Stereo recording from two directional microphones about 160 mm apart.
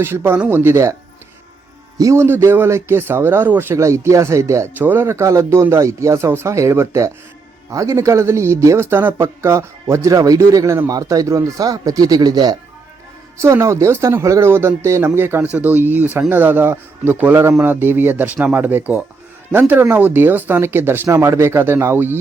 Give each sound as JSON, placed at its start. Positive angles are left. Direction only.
{"t": 0.0, "sound": "speech", "side_deg": -15}
{"t": 2.0, "sound": "speech", "side_deg": -20}